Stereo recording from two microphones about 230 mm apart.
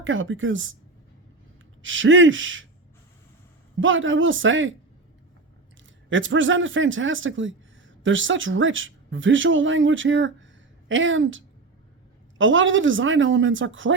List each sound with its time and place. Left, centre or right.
0.0 s speech: right
1.8 s speech: right
3.8 s speech: right
6.1 s speech: right